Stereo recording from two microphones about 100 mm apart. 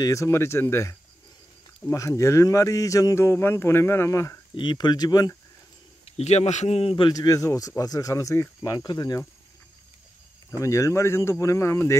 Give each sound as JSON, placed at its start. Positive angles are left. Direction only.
{"t": 0.0, "sound": "speech", "side_deg": 30}
{"t": 4.6, "sound": "speech", "side_deg": 50}
{"t": 6.0, "sound": "a man's voice", "side_deg": 90}
{"t": 7.1, "sound": "speech", "side_deg": 35}
{"t": 10.6, "sound": "speech", "side_deg": 30}